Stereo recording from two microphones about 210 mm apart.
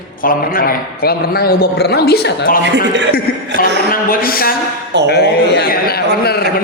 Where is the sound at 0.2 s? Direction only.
40° left (ahead or behind).